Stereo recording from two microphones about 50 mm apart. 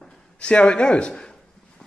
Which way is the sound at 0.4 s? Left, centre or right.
Centre.